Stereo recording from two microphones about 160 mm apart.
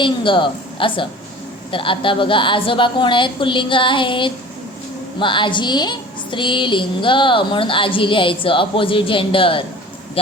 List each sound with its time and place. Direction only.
0.0 s a woman's voice: 30° left (ahead or behind)